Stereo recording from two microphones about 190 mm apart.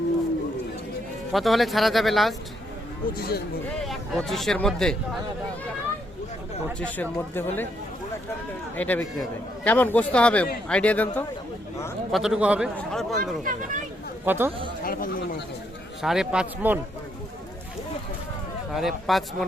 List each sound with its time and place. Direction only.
1.3 s speech: centre (ahead or behind)
3.2 s speech: 55° left (ahead or behind)
3.8 s speech: centre (ahead or behind)
6.7 s a man's voice: 5° left (ahead or behind)
8.7 s a man's voice: 10° left (ahead or behind)
12.1 s speech: centre (ahead or behind)
13.4 s speech: 45° right (ahead or behind)
14.3 s speech: 10° right (ahead or behind)
14.8 s speech: 50° left (ahead or behind)
16.0 s speech: centre (ahead or behind)
18.7 s speech: centre (ahead or behind)